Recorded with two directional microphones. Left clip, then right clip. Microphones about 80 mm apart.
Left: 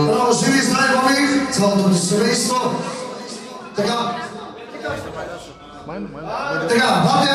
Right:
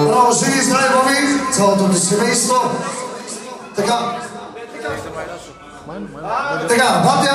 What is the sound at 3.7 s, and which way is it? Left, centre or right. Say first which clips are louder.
Speech: right 3 dB; right.